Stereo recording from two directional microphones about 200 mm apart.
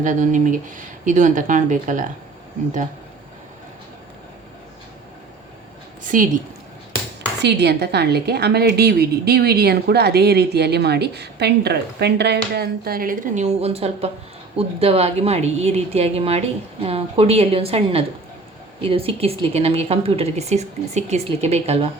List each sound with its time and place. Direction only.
0.0 s speech: 40° right (ahead or behind)
6.1 s a woman's voice: 40° right (ahead or behind)
7.4 s a woman's voice: 55° right (ahead or behind); by 21.8 s 30° right (ahead or behind)